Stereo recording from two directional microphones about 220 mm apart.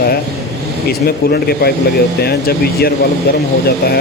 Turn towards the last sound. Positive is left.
turn(degrees=45)  # may be behind; listen again after turning